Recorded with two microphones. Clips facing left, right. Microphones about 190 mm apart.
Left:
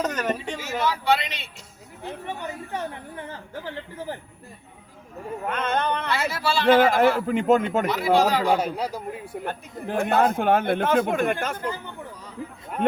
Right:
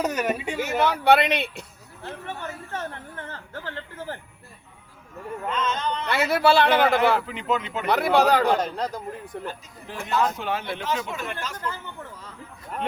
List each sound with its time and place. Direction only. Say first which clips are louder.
0.0 s speech: right 1 dB; 10° right (ahead or behind)
0.6 s speech: right 7 dB; 60° right (ahead or behind)
2.0 s speech: left 2 dB; 15° left (ahead or behind)
5.5 s speech: left 2 dB; 60° left (ahead or behind)
6.1 s speech: right 5 dB; 60° right (ahead or behind)
7.2 s speech: left 8 dB; 50° left (ahead or behind)
7.9 s speech: right 4 dB; 60° right (ahead or behind)
8.4 s speech: left 1 dB; 10° left (ahead or behind)
9.4 s speech: left 4 dB; 55° left (ahead or behind)